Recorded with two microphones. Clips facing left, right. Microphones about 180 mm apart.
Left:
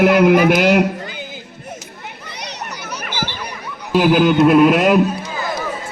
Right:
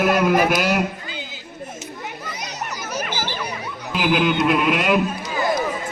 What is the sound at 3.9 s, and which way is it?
A man's voice, 40° left (ahead or behind).